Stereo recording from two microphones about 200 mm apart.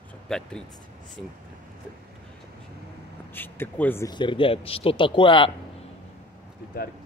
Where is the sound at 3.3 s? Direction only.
10° left (ahead or behind).